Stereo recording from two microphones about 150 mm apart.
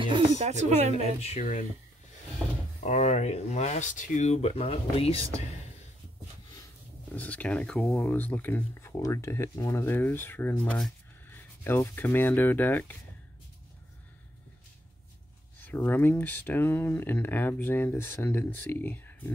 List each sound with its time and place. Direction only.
0.0 s speech: 40° right (ahead or behind)
1.4 s speech: 55° left (ahead or behind)
2.8 s speech: 50° left (ahead or behind)
7.2 s speech: 10° left (ahead or behind)
15.6 s speech: 15° left (ahead or behind)